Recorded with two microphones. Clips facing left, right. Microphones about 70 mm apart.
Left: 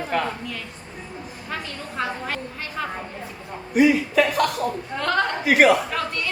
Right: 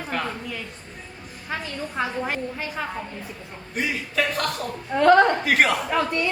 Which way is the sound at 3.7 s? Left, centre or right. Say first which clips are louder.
Left 11 dB; centre.